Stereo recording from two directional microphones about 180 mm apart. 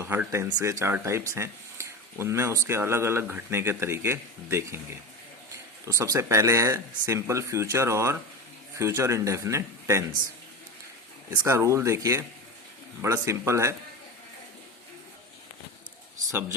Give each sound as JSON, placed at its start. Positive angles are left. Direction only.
{"t": 0.0, "sound": "speech", "side_deg": -15}
{"t": 5.9, "sound": "speech", "side_deg": -15}
{"t": 11.3, "sound": "speech", "side_deg": -15}